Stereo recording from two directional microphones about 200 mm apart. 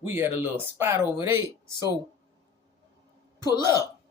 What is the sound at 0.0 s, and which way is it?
Speech, 10° right (ahead or behind).